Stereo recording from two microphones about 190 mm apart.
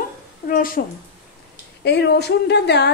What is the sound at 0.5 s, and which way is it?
Speech, 50° left (ahead or behind).